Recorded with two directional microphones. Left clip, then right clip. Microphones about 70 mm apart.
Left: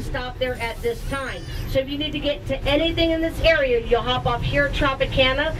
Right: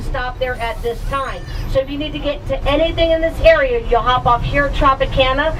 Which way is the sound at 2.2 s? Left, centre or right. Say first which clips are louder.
Right 5 dB; left.